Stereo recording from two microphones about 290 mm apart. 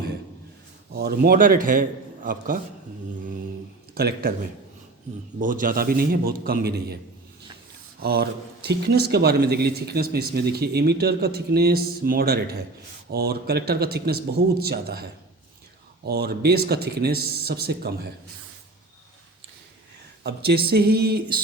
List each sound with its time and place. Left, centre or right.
0.9 s a man's voice: right
3.9 s speech: right
5.4 s speech: right
8.0 s speech: right
16.0 s speech: right
20.2 s speech: right